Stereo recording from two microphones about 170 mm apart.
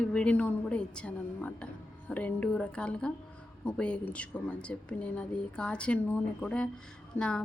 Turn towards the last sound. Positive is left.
turn(degrees=5)  # may be behind; listen again after turning